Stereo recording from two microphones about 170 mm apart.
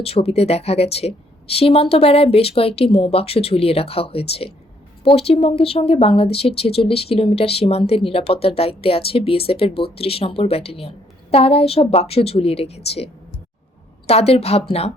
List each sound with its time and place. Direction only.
0.0 s speech: 35° left (ahead or behind)
14.1 s speech: 35° left (ahead or behind)